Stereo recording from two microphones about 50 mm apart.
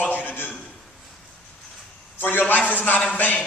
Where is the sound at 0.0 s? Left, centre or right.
Left.